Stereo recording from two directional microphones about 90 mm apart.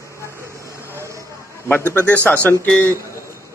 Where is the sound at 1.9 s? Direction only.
20° left (ahead or behind).